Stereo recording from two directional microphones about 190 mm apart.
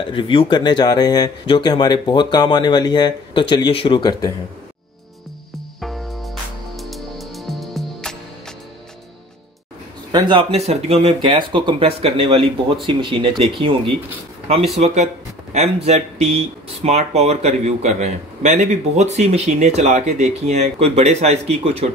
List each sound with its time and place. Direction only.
0.0 s speech: 25° left (ahead or behind)
5.8 s music: centre (ahead or behind)
10.1 s speech: 25° right (ahead or behind)
15.5 s speech: 35° right (ahead or behind)